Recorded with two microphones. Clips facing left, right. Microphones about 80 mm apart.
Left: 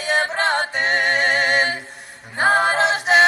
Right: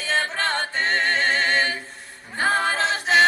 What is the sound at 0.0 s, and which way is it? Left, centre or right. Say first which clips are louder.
A capella: left 4 dB; centre.